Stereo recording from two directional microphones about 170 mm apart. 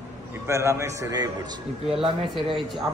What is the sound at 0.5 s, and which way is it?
A man's voice, 15° right (ahead or behind).